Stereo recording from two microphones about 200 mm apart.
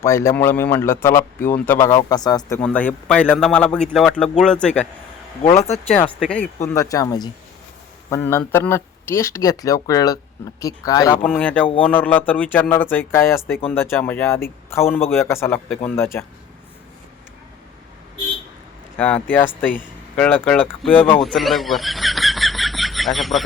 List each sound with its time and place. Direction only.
0.0 s speech: 15° left (ahead or behind)
2.6 s a man's voice: 5° left (ahead or behind)
6.1 s a man's voice: 5° left (ahead or behind)
6.7 s speech: 15° left (ahead or behind)
11.2 s speech: 5° left (ahead or behind)
18.9 s speech: 5° left (ahead or behind)
21.2 s a sound: centre (ahead or behind)